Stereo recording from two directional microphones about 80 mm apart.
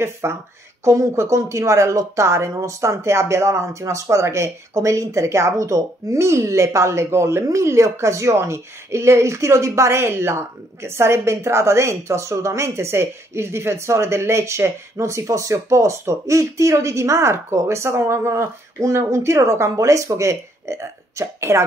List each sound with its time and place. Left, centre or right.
0.0 s a woman's voice: right